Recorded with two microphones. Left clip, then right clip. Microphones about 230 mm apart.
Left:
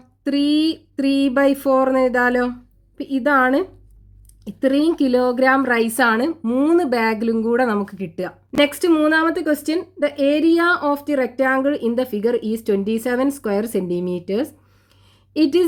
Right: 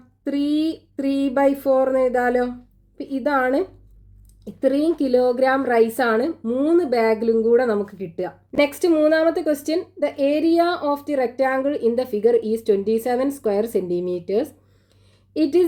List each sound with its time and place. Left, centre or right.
0.3 s a woman's voice: left
4.6 s a woman's voice: left